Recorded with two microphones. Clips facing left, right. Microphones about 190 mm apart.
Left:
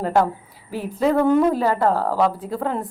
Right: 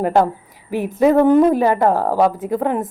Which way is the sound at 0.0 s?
20° right (ahead or behind).